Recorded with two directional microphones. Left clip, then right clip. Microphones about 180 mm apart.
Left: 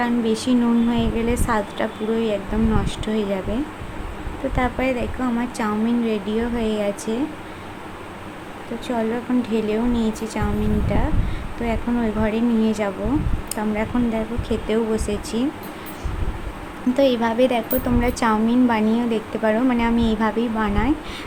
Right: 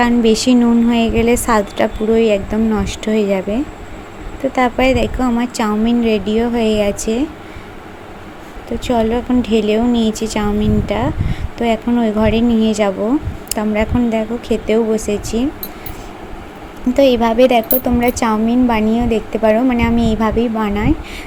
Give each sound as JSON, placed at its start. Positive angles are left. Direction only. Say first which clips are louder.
{"t": 0.0, "sound": "a woman's voice", "louder": "right 9 dB", "side_deg": -35}
{"t": 8.9, "sound": "a woman's voice", "louder": "right 8 dB", "side_deg": -30}
{"t": 16.9, "sound": "a woman's voice", "louder": "right 7 dB", "side_deg": -25}